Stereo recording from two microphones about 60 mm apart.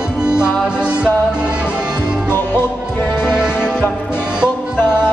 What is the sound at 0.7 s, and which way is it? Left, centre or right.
Music, centre.